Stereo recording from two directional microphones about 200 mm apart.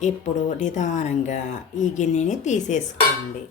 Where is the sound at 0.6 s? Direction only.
40° left (ahead or behind).